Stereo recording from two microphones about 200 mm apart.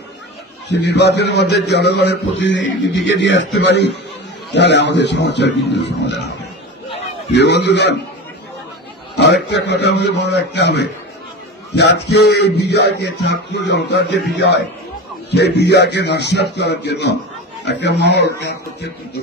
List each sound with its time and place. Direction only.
0.7 s a man's voice: 60° left (ahead or behind)
7.3 s a man's voice: 60° left (ahead or behind)
9.1 s a man's voice: 60° left (ahead or behind)